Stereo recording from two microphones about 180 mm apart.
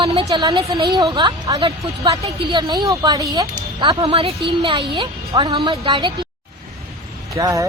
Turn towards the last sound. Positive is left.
turn(degrees=-15)  # may be behind; listen again after turning